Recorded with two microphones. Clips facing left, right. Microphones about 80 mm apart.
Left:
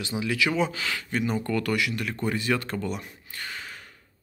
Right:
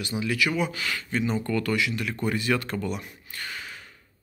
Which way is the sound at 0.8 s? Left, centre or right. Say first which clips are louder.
Even; left.